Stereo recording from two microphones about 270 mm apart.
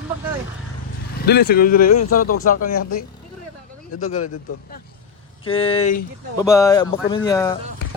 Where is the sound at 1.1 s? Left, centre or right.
Left.